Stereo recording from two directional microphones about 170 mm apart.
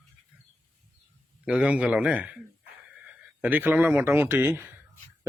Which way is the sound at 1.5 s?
5° right (ahead or behind).